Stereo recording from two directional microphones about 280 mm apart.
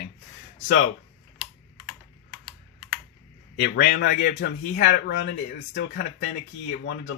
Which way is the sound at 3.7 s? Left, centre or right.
Left.